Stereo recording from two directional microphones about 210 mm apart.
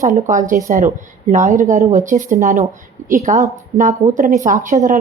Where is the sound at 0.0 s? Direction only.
40° right (ahead or behind).